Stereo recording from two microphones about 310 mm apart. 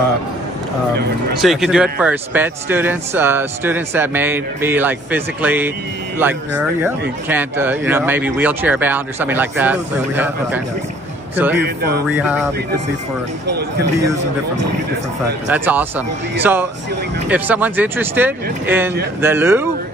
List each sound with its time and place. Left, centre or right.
1.4 s speech: centre
11.6 s speech: right
12.1 s speech: centre
13.6 s speech: right
15.5 s speech: centre